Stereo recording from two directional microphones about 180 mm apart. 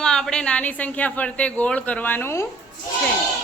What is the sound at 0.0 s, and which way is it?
Speech, 5° left (ahead or behind).